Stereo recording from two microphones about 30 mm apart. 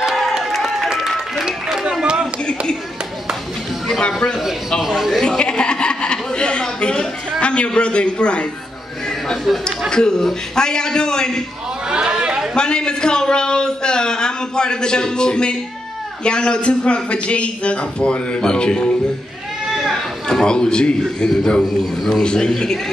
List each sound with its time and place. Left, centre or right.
0.4 s crowd: centre
0.9 s music: centre
1.4 s a sound: right
4.8 s a man's voice: centre
5.2 s chuckle: left
9.7 s a man's voice: left
11.9 s chatter: right
12.5 s a man's voice: left
20.2 s a man's voice: left